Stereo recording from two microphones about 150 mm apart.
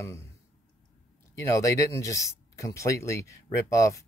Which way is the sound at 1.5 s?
20° left (ahead or behind).